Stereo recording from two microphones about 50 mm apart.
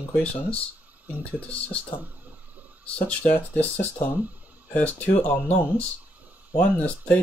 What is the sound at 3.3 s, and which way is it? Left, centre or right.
Speech, left.